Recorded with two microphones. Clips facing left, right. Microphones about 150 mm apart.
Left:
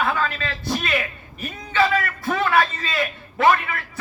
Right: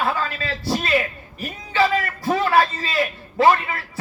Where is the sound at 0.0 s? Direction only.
30° right (ahead or behind).